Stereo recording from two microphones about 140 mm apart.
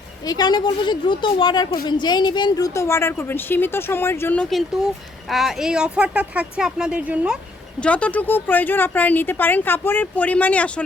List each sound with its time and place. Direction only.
0.3 s a woman's voice: 30° left (ahead or behind); by 4.4 s 15° left (ahead or behind)
4.4 s speech: centre (ahead or behind)
7.8 s speech: 10° left (ahead or behind)